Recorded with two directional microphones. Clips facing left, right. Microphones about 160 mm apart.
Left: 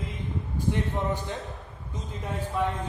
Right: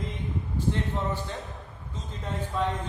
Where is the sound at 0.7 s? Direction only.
15° left (ahead or behind).